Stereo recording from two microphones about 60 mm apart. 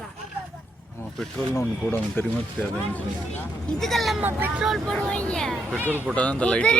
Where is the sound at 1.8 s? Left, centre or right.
Left.